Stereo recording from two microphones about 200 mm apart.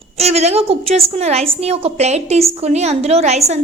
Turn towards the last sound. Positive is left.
turn(degrees=-35)  # may be behind; listen again after turning